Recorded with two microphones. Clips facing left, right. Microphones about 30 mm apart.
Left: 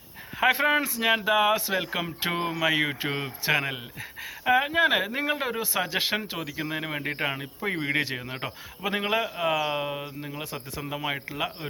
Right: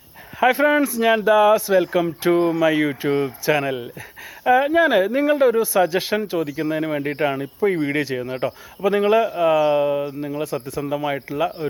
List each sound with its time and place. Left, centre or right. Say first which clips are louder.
0.3 s speech: right 6 dB; centre
10.4 s speech: right 10 dB; centre